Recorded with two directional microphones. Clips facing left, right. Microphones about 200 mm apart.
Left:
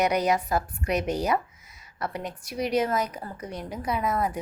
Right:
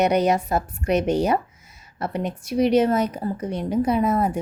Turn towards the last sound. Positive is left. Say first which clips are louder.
# right 7 dB
turn(degrees=-30)  # may be behind; listen again after turning